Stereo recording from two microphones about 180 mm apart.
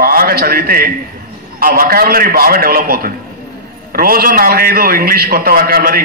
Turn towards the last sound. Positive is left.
turn(degrees=-55)  # may be behind; listen again after turning